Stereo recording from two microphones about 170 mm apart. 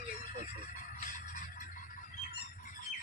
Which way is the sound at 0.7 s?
45° left (ahead or behind).